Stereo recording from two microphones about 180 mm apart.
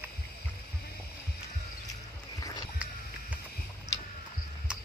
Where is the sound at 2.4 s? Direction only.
20° left (ahead or behind).